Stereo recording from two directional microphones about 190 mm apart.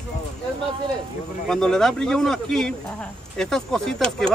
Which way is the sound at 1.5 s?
Centre (ahead or behind).